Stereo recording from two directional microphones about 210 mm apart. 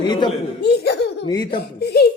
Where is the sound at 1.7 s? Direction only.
50° left (ahead or behind).